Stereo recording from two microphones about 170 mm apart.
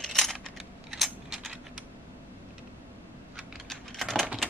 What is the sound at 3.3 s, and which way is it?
Computer keyboard, centre (ahead or behind).